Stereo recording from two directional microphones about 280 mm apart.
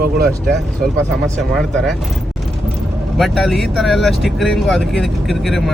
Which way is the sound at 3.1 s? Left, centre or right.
Centre.